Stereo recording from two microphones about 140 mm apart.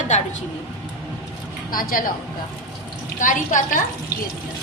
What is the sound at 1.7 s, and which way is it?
Speech, 90° left.